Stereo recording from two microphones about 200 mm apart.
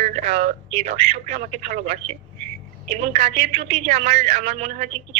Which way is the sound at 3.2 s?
30° right (ahead or behind).